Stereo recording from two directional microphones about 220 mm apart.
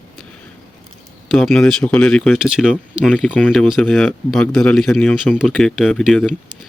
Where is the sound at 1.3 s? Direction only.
Centre (ahead or behind).